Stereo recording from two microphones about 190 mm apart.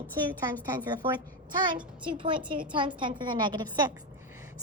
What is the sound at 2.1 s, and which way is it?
A woman's voice, 25° right (ahead or behind).